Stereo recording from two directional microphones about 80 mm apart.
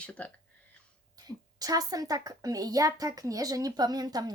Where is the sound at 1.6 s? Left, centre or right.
Right.